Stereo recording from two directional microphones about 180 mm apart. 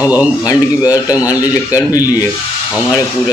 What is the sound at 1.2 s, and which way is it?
Speech, 20° left (ahead or behind).